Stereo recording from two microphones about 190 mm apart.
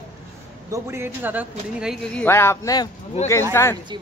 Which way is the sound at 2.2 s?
15° left (ahead or behind).